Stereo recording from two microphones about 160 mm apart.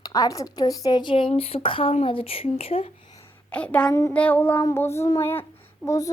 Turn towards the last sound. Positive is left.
turn(degrees=20)  # may be behind; listen again after turning